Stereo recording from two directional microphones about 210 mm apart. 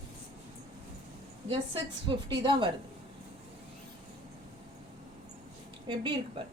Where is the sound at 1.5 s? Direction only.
25° right (ahead or behind).